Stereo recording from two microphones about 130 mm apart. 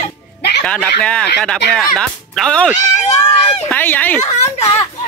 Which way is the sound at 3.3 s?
50° left (ahead or behind).